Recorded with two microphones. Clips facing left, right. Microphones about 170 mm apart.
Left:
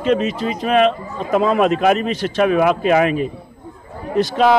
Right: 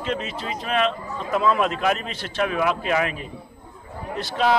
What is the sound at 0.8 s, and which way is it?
Speech, 65° left (ahead or behind).